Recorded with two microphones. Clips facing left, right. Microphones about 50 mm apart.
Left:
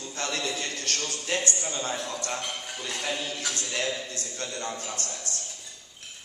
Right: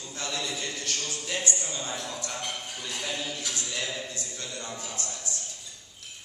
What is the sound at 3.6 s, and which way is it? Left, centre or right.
A man's voice, left.